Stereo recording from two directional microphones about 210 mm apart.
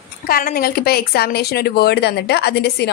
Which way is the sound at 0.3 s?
45° left (ahead or behind).